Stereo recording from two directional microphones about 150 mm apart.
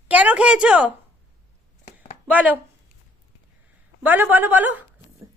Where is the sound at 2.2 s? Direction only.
10° right (ahead or behind).